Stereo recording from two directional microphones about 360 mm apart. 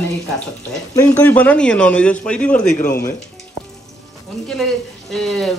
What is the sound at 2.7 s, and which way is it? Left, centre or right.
Speech, left.